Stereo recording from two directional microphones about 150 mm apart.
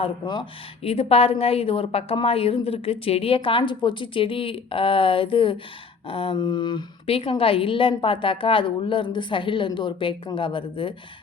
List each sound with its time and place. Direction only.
0.0 s a woman's voice: 35° left (ahead or behind)